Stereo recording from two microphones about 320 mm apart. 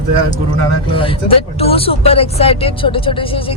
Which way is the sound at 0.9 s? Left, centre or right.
Centre.